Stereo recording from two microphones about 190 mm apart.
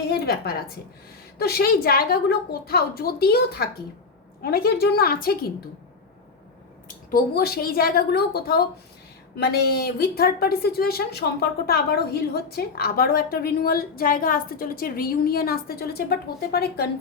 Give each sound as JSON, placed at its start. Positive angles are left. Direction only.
{"t": 0.1, "sound": "a woman's voice", "side_deg": 55}
{"t": 6.8, "sound": "a woman's voice", "side_deg": 50}